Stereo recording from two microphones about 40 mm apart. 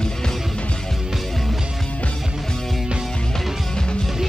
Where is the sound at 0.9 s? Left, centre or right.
Centre.